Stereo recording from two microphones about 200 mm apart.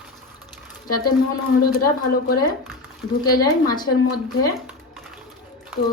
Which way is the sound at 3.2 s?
20° left (ahead or behind).